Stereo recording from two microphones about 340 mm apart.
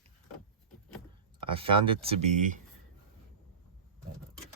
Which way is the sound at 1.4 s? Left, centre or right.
Centre.